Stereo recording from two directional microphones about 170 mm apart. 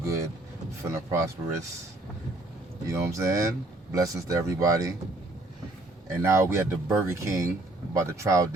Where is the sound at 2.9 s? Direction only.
15° right (ahead or behind).